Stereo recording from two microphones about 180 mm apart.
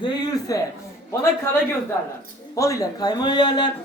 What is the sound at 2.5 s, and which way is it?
A man's voice, 15° left (ahead or behind).